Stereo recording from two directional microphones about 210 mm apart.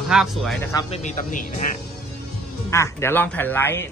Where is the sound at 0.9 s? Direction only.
35° left (ahead or behind).